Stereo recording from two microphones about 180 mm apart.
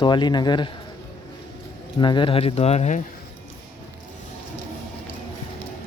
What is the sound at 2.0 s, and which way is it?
Speech, 25° left (ahead or behind).